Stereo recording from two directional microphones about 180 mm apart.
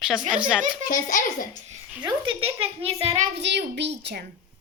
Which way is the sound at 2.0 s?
25° right (ahead or behind).